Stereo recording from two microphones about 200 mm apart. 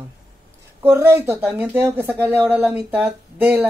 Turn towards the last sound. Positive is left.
turn(degrees=-5)  # may be behind; listen again after turning